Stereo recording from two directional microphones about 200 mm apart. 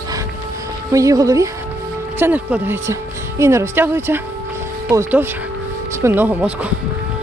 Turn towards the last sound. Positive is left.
turn(degrees=-5)  # may be behind; listen again after turning